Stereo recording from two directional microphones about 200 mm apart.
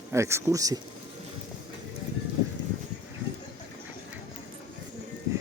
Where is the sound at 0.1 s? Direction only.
15° right (ahead or behind).